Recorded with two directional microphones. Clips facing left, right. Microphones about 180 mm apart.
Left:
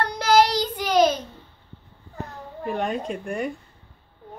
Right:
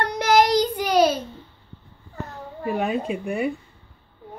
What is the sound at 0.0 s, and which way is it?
Child singing, 20° right (ahead or behind).